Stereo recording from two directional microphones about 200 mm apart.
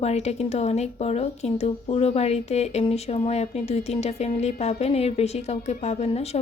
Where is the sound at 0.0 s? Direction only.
30° left (ahead or behind).